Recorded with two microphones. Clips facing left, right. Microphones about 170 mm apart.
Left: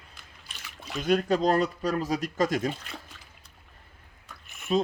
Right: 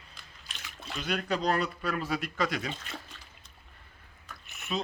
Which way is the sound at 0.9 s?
40° left (ahead or behind).